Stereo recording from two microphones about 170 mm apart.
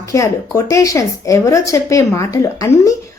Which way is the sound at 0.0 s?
20° left (ahead or behind).